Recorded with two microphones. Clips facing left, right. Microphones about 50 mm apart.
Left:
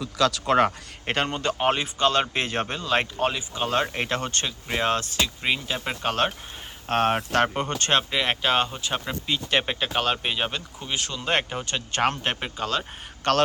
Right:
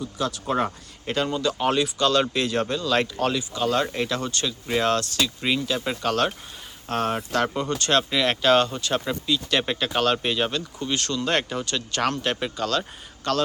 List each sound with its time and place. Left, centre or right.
0.0 s speech: left
4.7 s speech: left
6.8 s speech: left; by 9.1 s centre
9.2 s speech: left
9.8 s speech: centre
13.2 s speech: left